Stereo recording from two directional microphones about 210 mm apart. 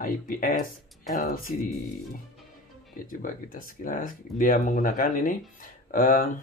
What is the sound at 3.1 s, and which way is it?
Speech, 40° left (ahead or behind).